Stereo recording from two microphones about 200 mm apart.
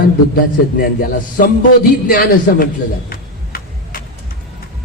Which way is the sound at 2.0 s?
50° left (ahead or behind).